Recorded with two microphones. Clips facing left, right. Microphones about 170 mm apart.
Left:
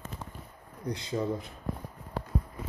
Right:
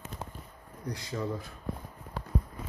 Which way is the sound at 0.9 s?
20° left (ahead or behind).